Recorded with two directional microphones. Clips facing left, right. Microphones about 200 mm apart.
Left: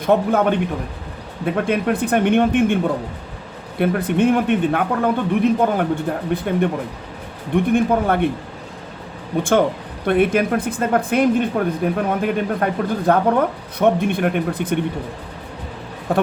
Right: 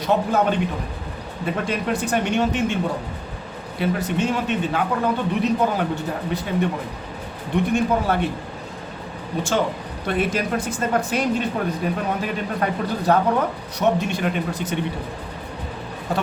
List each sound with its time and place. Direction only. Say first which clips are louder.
0.0 s speech: left 4 dB; 55° left (ahead or behind)
3.8 s speech: left 5 dB; 55° left (ahead or behind)
9.4 s speech: left 6 dB; 55° left (ahead or behind)
16.1 s speech: left 6 dB; 55° left (ahead or behind)